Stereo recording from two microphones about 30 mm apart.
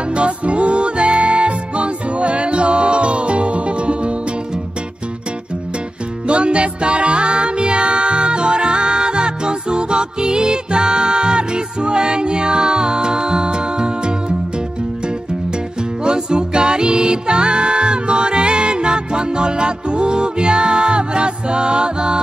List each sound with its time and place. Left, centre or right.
0.1 s music: right
6.2 s music: right
16.0 s music: right